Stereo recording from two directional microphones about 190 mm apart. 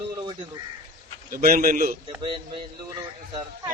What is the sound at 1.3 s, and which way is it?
Speech, 50° right (ahead or behind).